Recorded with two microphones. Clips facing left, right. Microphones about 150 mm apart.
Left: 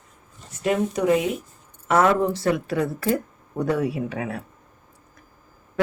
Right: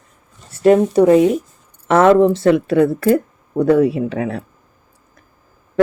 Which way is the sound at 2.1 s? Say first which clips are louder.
Right 10 dB; 85° right.